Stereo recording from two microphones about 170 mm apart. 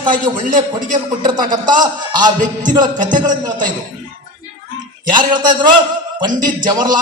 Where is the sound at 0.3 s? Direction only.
50° right (ahead or behind).